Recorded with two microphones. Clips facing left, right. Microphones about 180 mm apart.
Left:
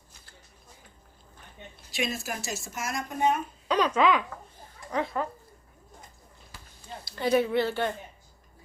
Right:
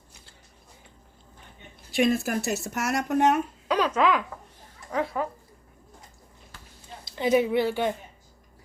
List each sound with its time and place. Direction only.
1.9 s speech: 55° right (ahead or behind); by 3.4 s 75° right (ahead or behind)
3.7 s speech: 5° right (ahead or behind)
7.0 s a woman's voice: 20° right (ahead or behind)